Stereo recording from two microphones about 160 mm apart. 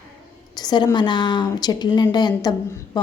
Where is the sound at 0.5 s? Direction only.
25° left (ahead or behind).